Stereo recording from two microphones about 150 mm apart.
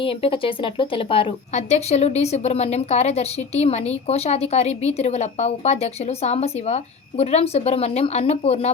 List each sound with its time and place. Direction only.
0.0 s speech: 35° left (ahead or behind)
1.5 s a woman's voice: 45° left (ahead or behind)